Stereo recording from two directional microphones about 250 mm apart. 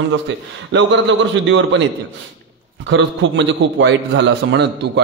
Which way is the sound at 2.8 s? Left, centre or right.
Right.